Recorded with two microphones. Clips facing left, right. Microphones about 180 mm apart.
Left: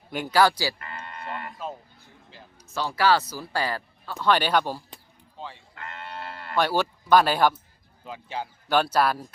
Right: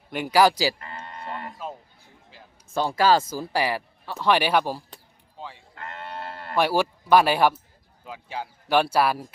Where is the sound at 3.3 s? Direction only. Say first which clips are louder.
Right 3 dB; 10° right (ahead or behind).